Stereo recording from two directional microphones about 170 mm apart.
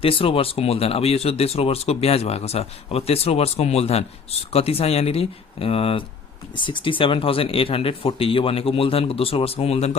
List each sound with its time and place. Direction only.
0.0 s speech: 30° left (ahead or behind)